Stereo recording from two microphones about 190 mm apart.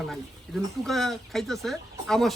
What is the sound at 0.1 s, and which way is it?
Speech, centre (ahead or behind).